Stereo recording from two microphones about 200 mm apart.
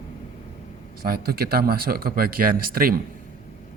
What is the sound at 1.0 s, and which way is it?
Speech, 50° right (ahead or behind).